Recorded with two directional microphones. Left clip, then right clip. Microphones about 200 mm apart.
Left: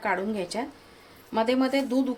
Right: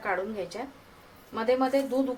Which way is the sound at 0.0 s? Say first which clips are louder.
Left 3 dB; 55° left (ahead or behind).